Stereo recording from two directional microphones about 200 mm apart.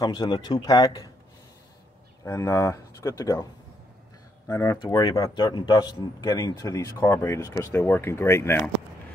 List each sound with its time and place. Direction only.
0.0 s speech: 20° left (ahead or behind)
2.2 s speech: 15° left (ahead or behind)
4.5 s speech: 20° left (ahead or behind)